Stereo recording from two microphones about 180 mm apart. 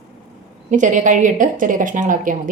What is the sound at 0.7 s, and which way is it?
A woman's voice, 45° right (ahead or behind).